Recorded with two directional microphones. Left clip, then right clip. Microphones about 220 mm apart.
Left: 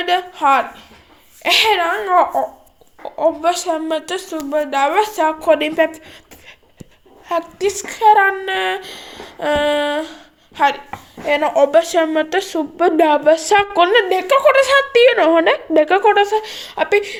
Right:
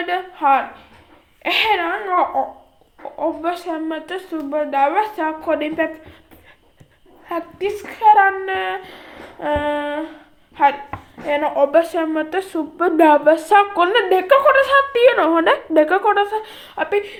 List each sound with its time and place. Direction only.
0.0 s a woman's voice: 40° left (ahead or behind)
7.3 s a woman's voice: 35° left (ahead or behind)